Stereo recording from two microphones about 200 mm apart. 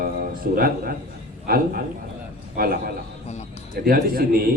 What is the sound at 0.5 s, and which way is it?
A man's voice, 45° right (ahead or behind).